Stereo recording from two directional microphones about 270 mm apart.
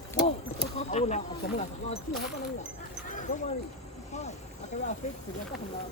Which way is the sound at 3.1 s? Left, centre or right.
Left.